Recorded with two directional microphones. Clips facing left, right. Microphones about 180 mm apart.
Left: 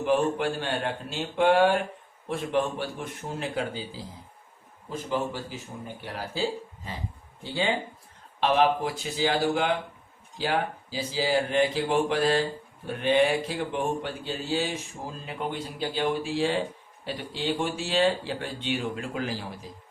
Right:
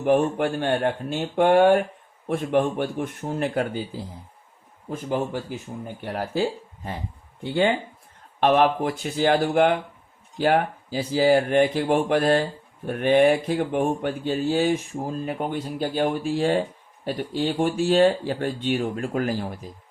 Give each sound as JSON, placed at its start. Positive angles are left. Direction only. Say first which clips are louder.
{"t": 0.0, "sound": "speech", "louder": "right 4 dB", "side_deg": -55}